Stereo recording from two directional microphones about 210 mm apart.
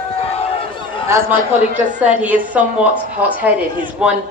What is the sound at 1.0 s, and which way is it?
A woman's voice, 10° right (ahead or behind).